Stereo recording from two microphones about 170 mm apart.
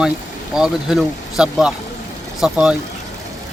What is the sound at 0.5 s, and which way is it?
Speech, 5° right (ahead or behind).